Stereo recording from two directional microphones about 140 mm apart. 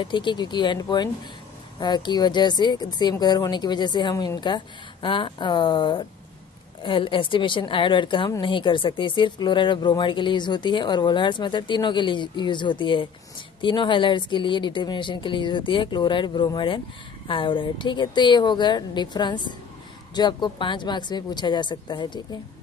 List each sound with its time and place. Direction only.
0.0 s speech: 35° left (ahead or behind)